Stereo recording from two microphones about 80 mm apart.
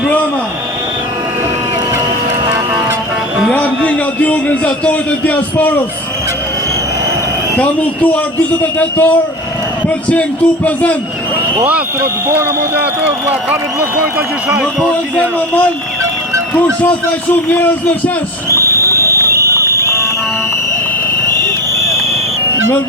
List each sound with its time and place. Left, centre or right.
3.5 s speech: centre
7.5 s a man's voice: centre
15.1 s a man's voice: centre
17.5 s a man's voice: left
18.4 s clip-clop: right
19.8 s music: left
21.4 s a sound: right